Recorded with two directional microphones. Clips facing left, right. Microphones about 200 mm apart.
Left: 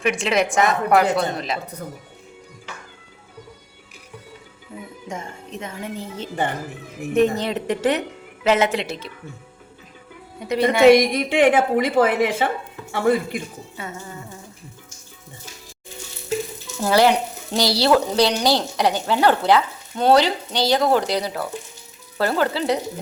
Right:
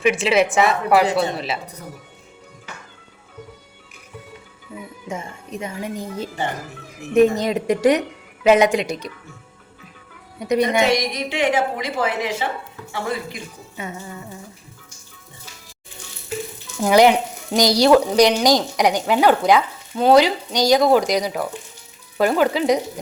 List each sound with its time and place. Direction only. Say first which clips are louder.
0.0 s a woman's voice: right 3 dB; 5° right (ahead or behind)
5.0 s speech: right 2 dB; 10° right (ahead or behind)
10.4 s speech: even; 15° right (ahead or behind)
10.8 s a woman's voice: left 8 dB; 55° left (ahead or behind)
16.8 s speech: right 3 dB; 15° right (ahead or behind)